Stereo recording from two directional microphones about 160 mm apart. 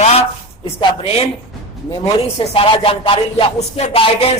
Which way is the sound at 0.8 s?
40° left (ahead or behind).